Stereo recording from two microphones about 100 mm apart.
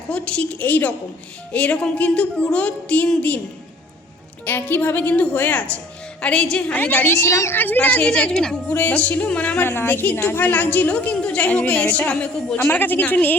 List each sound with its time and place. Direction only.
0.1 s a woman's voice: 10° left (ahead or behind)
4.4 s a woman's voice: 20° left (ahead or behind)